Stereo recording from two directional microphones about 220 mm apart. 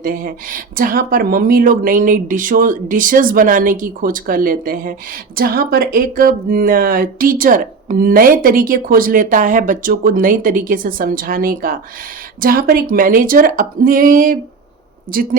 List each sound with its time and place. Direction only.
0.0 s speech: 40° right (ahead or behind)